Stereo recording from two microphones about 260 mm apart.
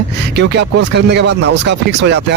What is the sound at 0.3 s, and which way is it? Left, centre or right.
Speech, right.